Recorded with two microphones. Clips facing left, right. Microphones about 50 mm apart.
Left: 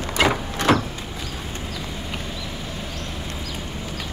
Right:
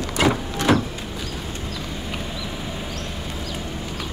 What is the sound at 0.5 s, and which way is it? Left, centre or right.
Vehicle, left.